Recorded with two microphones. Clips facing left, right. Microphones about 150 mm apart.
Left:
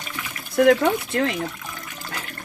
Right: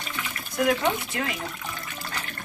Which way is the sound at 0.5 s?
60° left (ahead or behind).